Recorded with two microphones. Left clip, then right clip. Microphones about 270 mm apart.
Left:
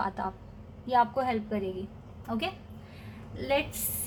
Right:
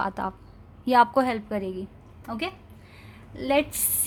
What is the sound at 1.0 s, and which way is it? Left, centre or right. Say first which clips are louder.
Speech: right 6 dB; right.